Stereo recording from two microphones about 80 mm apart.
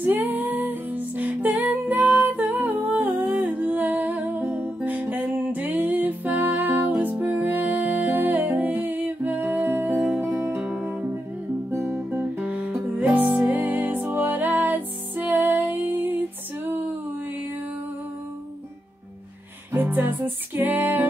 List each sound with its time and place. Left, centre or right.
0.0 s music: right
11.8 s guitar: centre
12.9 s music: centre
19.7 s music: right